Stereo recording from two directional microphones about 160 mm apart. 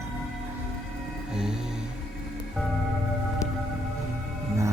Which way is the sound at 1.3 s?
5° right (ahead or behind).